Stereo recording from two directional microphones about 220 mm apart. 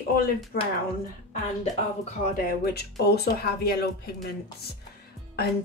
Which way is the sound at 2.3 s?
45° left (ahead or behind).